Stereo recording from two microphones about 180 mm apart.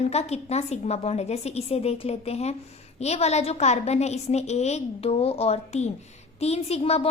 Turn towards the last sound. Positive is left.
turn(degrees=35)  # may be behind; listen again after turning